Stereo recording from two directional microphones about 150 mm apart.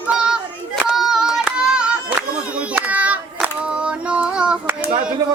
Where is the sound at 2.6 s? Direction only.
10° right (ahead or behind).